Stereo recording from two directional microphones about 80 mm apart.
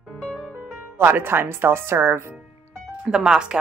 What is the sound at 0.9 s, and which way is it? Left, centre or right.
Speech, right.